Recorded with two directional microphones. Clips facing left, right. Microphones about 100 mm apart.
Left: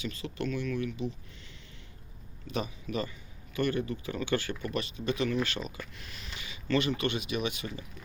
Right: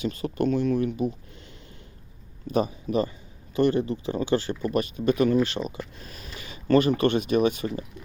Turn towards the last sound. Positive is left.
turn(degrees=-45)  # may be behind; listen again after turning